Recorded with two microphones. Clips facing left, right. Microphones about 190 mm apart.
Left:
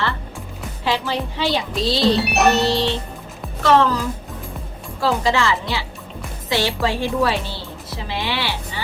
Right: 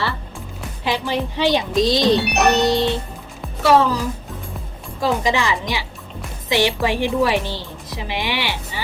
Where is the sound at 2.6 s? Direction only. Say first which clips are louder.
Right 2 dB; 15° right (ahead or behind).